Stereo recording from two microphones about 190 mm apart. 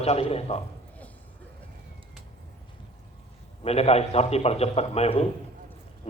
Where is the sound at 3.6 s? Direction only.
30° left (ahead or behind).